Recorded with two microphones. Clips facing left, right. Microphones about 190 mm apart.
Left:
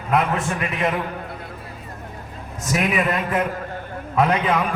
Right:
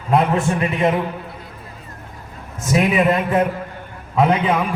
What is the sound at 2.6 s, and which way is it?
Speech, 25° right (ahead or behind).